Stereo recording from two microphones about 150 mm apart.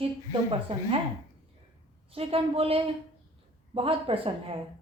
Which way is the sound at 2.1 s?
40° right (ahead or behind).